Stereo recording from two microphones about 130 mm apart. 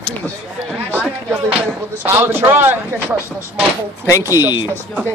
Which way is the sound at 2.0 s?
15° right (ahead or behind).